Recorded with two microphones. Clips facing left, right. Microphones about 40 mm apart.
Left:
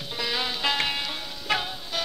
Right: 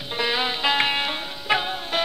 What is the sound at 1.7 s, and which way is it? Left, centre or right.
Music, right.